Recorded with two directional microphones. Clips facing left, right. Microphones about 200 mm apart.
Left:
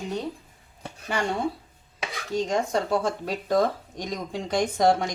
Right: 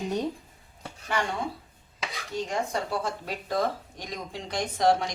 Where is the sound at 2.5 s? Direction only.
45° left (ahead or behind).